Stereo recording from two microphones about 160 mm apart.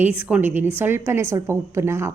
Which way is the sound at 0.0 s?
10° right (ahead or behind).